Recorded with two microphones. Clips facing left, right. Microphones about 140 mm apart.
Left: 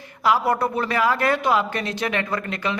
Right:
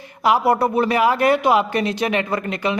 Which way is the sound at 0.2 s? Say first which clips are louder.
Right 3 dB; 15° right (ahead or behind).